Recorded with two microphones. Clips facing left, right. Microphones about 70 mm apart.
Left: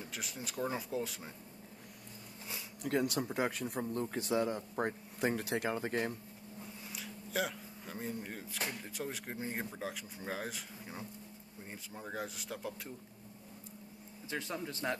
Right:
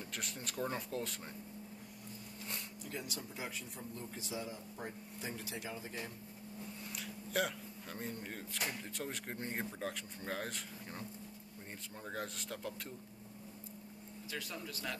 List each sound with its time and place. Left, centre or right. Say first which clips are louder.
0.0 s speech: left 1 dB; centre
2.8 s a man's voice: left 15 dB; left
6.9 s speech: even; centre
14.3 s speech: left 5 dB; left